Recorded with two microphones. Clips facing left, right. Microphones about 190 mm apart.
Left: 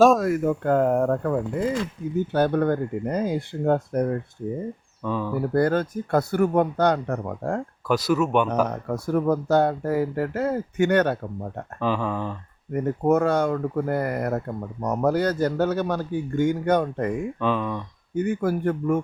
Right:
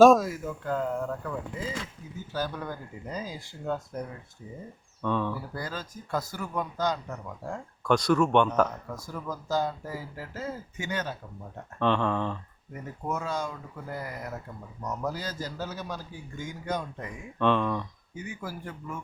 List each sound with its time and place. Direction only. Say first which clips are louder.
0.0 s speech: even; centre (ahead or behind)
0.3 s speech: left 11 dB; 60° left (ahead or behind)
5.0 s speech: left 3 dB; 5° left (ahead or behind)
5.4 s speech: left 16 dB; 60° left (ahead or behind)
7.9 s speech: left 1 dB; 5° left (ahead or behind)
8.7 s speech: left 14 dB; 60° left (ahead or behind)
11.8 s speech: left 1 dB; 5° left (ahead or behind)
12.7 s speech: left 14 dB; 60° left (ahead or behind)
17.4 s speech: right 2 dB; 5° left (ahead or behind)
18.1 s speech: left 16 dB; 60° left (ahead or behind)